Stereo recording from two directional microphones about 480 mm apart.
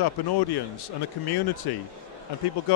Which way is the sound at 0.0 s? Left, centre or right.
Left.